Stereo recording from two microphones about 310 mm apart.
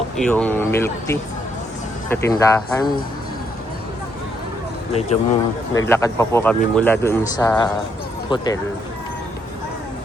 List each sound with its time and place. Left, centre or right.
0.2 s speech: centre
4.9 s speech: left
5.7 s speech: centre